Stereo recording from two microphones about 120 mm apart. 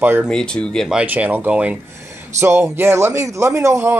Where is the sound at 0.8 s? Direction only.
10° right (ahead or behind).